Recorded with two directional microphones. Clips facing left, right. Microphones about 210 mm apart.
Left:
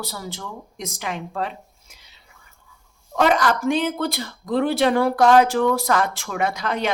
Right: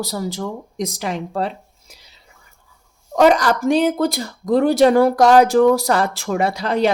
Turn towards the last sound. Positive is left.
turn(degrees=-35)  # may be behind; listen again after turning